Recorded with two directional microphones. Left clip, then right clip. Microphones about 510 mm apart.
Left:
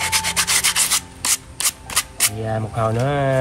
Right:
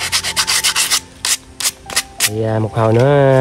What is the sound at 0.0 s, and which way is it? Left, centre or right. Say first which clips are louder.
Rub: right 3 dB; centre.